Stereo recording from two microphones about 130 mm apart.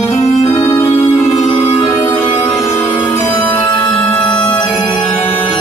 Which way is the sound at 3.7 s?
40° left (ahead or behind).